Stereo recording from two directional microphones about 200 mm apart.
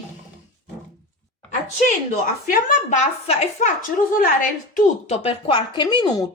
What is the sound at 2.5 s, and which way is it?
A woman's voice, 45° left (ahead or behind).